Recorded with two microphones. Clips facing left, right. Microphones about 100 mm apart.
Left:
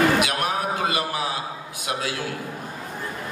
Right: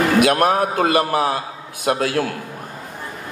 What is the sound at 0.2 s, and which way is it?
A man's voice, 50° right (ahead or behind).